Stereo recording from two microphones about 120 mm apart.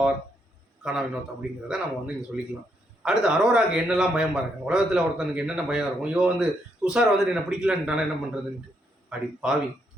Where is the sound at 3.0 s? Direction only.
5° right (ahead or behind).